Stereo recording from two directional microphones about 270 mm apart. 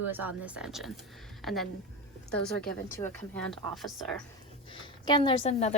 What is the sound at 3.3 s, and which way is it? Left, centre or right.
Speech, centre.